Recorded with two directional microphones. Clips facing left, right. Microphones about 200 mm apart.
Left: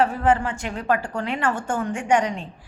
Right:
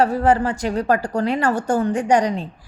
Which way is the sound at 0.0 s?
40° right (ahead or behind).